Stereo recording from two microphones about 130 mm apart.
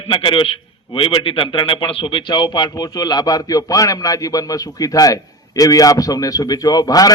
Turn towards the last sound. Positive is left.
turn(degrees=30)  # may be behind; listen again after turning